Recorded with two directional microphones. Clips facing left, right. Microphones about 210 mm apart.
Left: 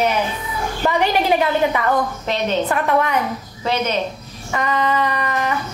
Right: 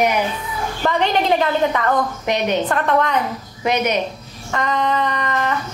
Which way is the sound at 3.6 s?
15° right (ahead or behind).